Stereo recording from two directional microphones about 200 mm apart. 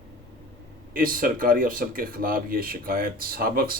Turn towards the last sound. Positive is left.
turn(degrees=-45)  # may be behind; listen again after turning